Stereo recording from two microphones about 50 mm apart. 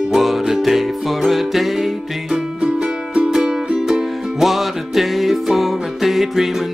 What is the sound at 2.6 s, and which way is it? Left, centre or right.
Music, centre.